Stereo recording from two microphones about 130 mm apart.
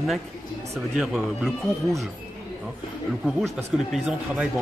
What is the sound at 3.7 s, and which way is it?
Speech, 5° right (ahead or behind).